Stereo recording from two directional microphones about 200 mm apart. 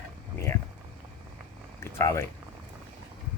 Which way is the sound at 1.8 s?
15° left (ahead or behind).